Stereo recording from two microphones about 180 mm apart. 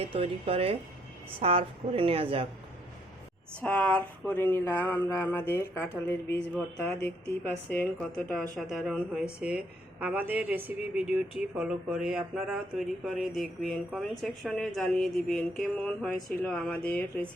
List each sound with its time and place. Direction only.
0.0 s a woman's voice: 30° right (ahead or behind)
3.6 s speech: 10° left (ahead or behind)
7.4 s a woman's voice: 10° left (ahead or behind)